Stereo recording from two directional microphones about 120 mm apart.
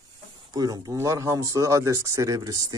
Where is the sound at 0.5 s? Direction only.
30° right (ahead or behind).